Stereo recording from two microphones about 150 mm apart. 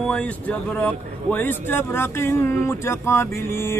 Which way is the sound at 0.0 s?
5° left (ahead or behind).